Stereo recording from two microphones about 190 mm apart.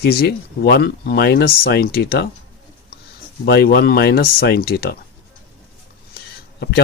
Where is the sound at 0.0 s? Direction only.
55° left (ahead or behind).